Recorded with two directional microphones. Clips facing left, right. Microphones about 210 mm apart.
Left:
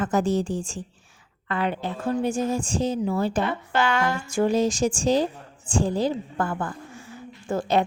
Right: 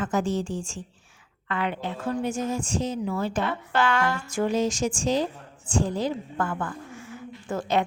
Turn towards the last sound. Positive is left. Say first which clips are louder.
# left 3 dB
turn(degrees=35)  # may be behind; listen again after turning